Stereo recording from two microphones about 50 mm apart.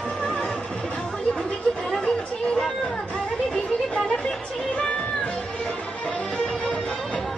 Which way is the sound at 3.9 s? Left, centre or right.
Centre.